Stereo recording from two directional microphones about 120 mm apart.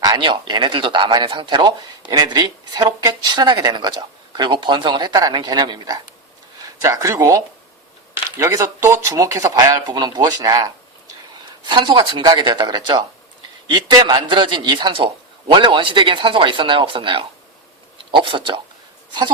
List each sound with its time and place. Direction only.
0.0 s speech: 40° right (ahead or behind)
11.6 s speech: 40° right (ahead or behind)